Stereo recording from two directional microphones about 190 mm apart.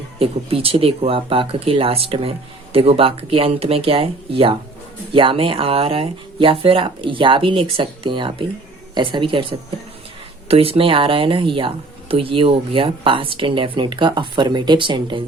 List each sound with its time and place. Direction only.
0.2 s speech: 30° right (ahead or behind)